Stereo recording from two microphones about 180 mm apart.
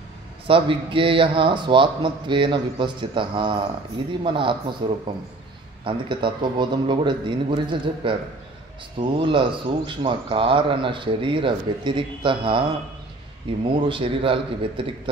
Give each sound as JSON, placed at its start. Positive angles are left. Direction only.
{"t": 0.5, "sound": "speech", "side_deg": -30}
{"t": 13.7, "sound": "speech", "side_deg": -30}